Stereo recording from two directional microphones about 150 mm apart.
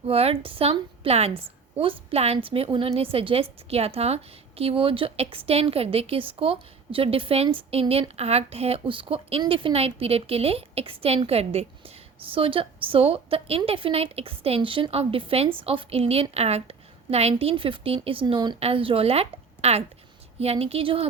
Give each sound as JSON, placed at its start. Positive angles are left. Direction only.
{"t": 0.1, "sound": "a woman's voice", "side_deg": -40}